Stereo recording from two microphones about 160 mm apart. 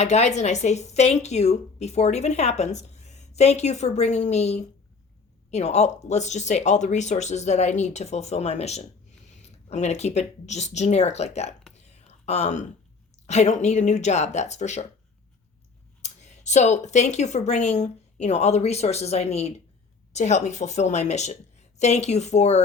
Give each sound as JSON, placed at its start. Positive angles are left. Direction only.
{"t": 0.0, "sound": "speech", "side_deg": 45}
{"t": 11.8, "sound": "a sound", "side_deg": 45}
{"t": 13.2, "sound": "speech", "side_deg": 45}
{"t": 16.0, "sound": "speech", "side_deg": 45}